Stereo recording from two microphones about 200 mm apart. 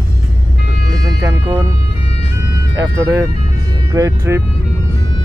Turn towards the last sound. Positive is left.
turn(degrees=-15)  # may be behind; listen again after turning